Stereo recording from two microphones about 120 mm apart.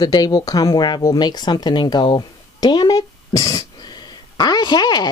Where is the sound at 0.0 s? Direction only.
35° left (ahead or behind).